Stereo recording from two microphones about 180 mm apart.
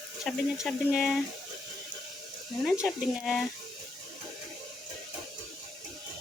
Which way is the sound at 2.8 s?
Centre (ahead or behind).